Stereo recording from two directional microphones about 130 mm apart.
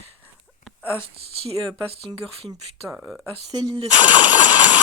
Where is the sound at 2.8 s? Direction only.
5° right (ahead or behind).